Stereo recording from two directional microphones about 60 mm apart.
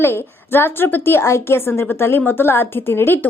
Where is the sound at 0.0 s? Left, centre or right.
Left.